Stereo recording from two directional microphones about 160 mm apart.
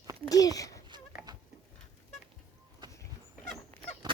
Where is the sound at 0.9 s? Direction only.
25° right (ahead or behind).